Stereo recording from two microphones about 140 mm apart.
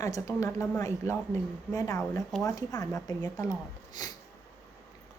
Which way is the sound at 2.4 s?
25° left (ahead or behind).